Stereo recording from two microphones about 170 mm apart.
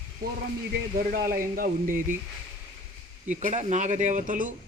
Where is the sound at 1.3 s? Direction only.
55° right (ahead or behind).